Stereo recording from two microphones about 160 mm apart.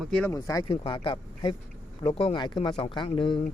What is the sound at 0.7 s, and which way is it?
Speech, 35° left (ahead or behind).